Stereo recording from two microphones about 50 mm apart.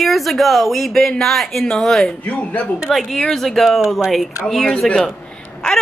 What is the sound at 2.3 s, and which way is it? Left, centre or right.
Speech, left.